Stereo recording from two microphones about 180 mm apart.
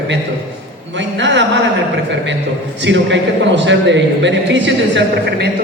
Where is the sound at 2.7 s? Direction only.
80° right.